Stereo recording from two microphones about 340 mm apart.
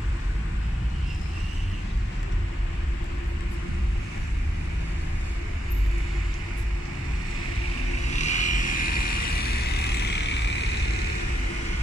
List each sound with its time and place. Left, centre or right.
8.2 s vehicle: left